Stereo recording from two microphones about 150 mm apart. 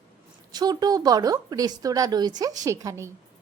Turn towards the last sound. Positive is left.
turn(degrees=-20)  # may be behind; listen again after turning